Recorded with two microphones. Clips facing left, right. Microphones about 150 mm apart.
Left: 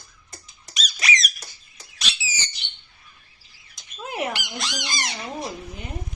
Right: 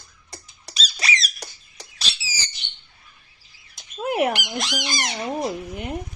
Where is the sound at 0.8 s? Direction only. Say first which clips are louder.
Left 1 dB; 30° right (ahead or behind).